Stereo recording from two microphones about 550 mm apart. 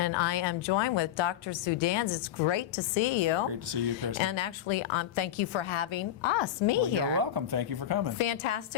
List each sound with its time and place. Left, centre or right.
0.0 s a woman's voice: left
3.7 s speech: right
4.2 s a woman's voice: left
7.2 s speech: right
8.2 s a woman's voice: left